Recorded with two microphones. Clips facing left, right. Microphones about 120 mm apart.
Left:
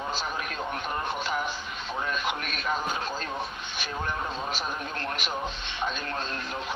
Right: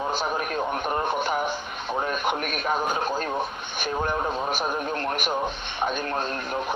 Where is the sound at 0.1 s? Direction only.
55° right (ahead or behind).